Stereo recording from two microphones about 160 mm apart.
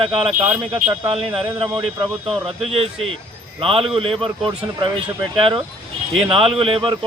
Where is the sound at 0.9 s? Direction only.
35° right (ahead or behind).